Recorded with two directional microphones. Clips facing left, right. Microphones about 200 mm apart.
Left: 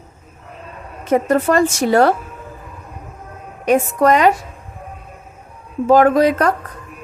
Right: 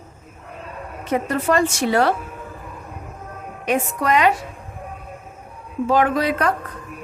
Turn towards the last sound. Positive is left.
turn(degrees=45)  # may be behind; listen again after turning